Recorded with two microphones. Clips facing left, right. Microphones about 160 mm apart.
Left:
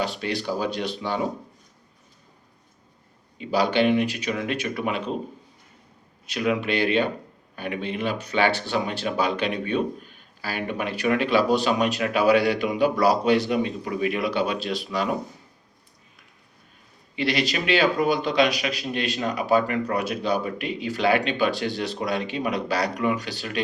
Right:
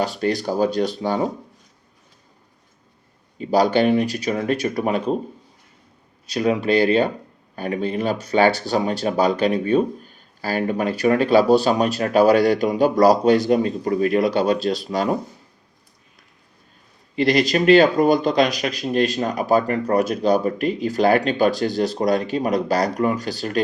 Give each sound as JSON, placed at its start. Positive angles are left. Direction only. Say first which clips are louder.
{"t": 0.0, "sound": "speech", "louder": "right 5 dB", "side_deg": -45}
{"t": 3.3, "sound": "speech", "louder": "right 5 dB", "side_deg": -40}
{"t": 6.2, "sound": "speech", "louder": "right 5 dB", "side_deg": -35}
{"t": 17.2, "sound": "speech", "louder": "right 7 dB", "side_deg": -45}